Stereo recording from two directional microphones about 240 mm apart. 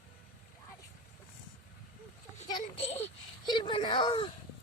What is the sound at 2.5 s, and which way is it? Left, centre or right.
A child's voice, left.